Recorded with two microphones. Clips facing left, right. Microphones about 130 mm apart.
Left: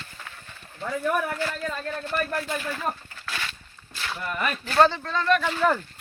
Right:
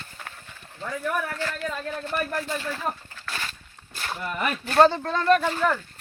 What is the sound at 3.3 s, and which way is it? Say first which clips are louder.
Walk: even; 40° right (ahead or behind).